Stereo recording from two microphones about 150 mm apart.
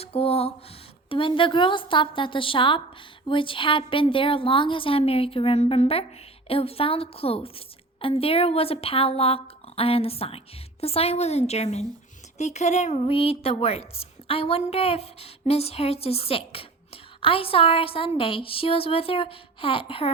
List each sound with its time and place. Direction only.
0.0 s a woman's voice: 40° left (ahead or behind)
13.1 s a woman's voice: 40° left (ahead or behind)